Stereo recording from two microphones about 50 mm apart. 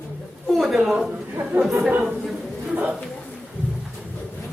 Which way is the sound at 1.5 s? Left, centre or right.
Right.